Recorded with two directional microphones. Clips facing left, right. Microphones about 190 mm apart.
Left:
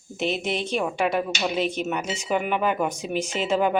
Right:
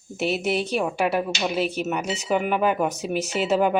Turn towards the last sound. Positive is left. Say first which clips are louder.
# right 2 dB
turn(degrees=-5)  # may be behind; listen again after turning